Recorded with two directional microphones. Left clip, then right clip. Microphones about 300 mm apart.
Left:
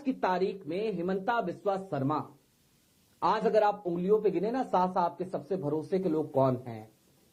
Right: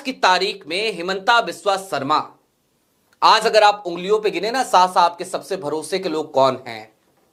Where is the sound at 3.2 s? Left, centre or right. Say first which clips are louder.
Right 13 dB; centre.